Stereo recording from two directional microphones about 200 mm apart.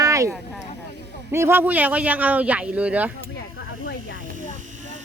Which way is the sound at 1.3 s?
10° right (ahead or behind).